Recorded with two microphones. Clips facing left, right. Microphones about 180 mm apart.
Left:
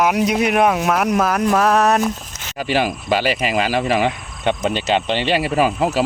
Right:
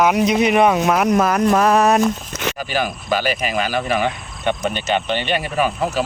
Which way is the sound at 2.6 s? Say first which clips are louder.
Left 7 dB; 30° left (ahead or behind).